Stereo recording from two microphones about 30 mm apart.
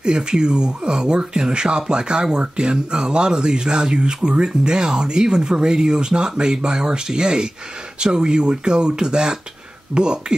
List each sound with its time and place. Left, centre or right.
0.0 s speech: right